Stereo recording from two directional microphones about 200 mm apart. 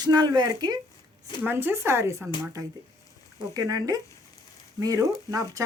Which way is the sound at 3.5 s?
15° right (ahead or behind).